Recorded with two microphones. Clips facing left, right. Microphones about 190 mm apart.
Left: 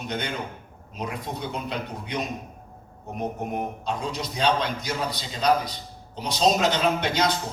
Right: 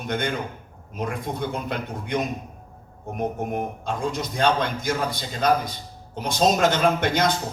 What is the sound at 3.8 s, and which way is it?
A man's voice, 50° right (ahead or behind).